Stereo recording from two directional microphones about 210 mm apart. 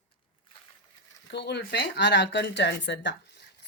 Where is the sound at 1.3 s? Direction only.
55° left (ahead or behind).